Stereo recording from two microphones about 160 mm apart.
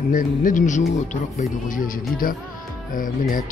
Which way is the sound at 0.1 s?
55° left (ahead or behind).